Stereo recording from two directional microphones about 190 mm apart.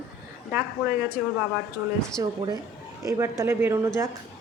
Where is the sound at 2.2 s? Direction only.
20° right (ahead or behind).